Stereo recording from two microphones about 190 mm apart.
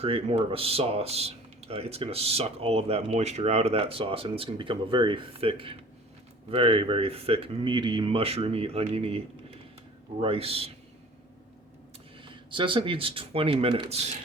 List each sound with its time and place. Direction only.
0.0 s speech: 30° right (ahead or behind)
12.2 s speech: 25° right (ahead or behind)